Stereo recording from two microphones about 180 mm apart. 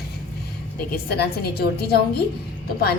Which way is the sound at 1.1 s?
65° left (ahead or behind).